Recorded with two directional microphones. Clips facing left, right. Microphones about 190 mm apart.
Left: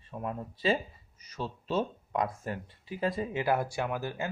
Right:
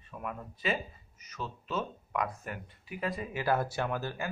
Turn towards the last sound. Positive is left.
turn(degrees=20)  # may be behind; listen again after turning